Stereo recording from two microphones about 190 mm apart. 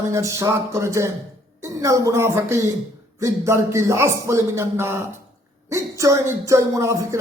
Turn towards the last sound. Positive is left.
turn(degrees=-15)  # may be behind; listen again after turning